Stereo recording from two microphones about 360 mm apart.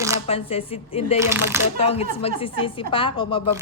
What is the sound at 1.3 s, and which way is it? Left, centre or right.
Speech, centre.